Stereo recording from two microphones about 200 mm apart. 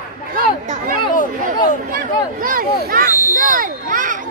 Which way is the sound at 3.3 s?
40° right (ahead or behind).